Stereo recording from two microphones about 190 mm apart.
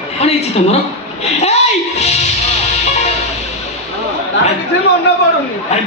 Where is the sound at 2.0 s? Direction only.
35° left (ahead or behind).